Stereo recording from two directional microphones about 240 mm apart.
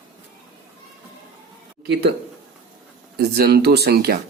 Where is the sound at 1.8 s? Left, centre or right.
Right.